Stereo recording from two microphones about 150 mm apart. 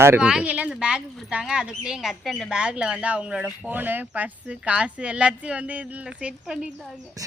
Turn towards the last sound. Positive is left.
turn(degrees=-20)  # may be behind; listen again after turning